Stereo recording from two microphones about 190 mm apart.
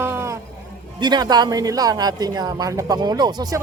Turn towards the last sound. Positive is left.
turn(degrees=-20)  # may be behind; listen again after turning